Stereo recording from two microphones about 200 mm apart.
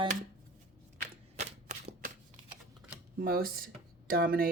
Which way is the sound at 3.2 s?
45° right (ahead or behind).